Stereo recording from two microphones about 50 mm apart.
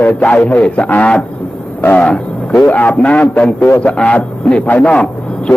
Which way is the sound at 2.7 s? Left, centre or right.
Left.